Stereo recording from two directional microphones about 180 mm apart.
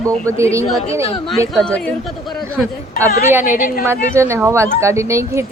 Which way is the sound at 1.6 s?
5° left (ahead or behind).